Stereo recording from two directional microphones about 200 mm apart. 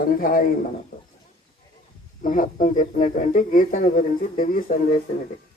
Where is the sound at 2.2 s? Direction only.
40° left (ahead or behind).